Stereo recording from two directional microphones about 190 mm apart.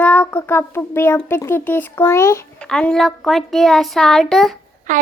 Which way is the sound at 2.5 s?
5° left (ahead or behind).